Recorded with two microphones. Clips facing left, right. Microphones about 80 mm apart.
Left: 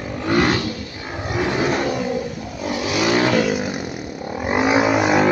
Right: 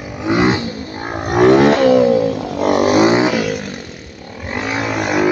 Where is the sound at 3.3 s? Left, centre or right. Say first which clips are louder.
Even; centre.